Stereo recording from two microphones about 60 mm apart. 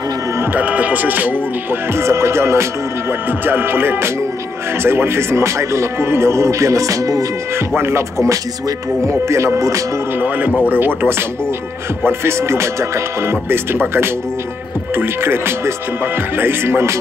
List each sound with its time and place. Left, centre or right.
0.6 s music: right
2.0 s speech: right
3.3 s speech: right
7.5 s speech: right
9.1 s speech: right
10.1 s music: right
11.0 s speech: right